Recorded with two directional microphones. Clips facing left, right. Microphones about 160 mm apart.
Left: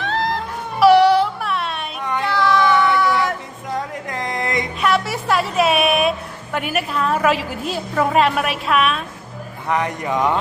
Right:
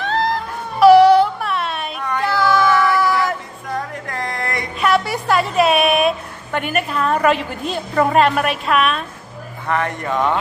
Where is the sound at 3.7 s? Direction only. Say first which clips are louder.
Even; 20° left (ahead or behind).